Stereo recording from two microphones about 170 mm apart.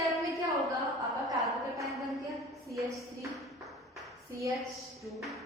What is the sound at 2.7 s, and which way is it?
Speech, 20° right (ahead or behind).